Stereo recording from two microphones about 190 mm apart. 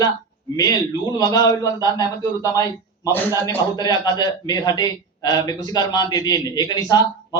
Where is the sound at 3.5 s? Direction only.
20° left (ahead or behind).